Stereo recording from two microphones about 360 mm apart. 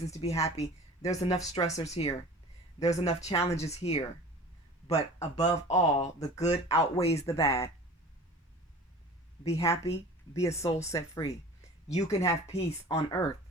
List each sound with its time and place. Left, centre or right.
0.0 s speech: centre
9.4 s speech: centre